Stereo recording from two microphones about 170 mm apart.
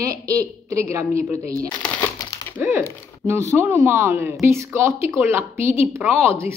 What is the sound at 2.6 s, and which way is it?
Speech, 15° right (ahead or behind).